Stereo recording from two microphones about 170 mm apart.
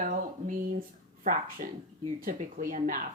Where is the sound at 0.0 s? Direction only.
50° right (ahead or behind).